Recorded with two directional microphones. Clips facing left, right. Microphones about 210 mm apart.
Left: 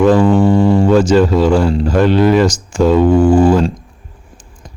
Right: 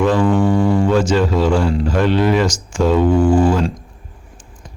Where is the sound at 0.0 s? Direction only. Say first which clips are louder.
Left 5 dB; 40° left (ahead or behind).